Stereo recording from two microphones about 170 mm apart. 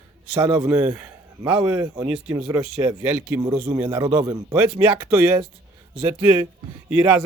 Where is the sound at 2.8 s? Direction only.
10° right (ahead or behind).